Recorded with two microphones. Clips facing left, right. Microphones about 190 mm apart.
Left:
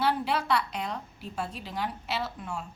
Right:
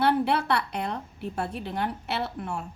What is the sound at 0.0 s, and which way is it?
A woman's voice, 60° right (ahead or behind).